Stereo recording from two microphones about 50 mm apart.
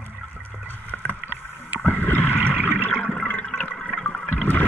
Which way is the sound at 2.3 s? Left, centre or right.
Right.